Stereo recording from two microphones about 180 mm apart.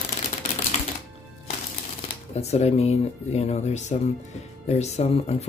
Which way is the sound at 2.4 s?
35° left (ahead or behind).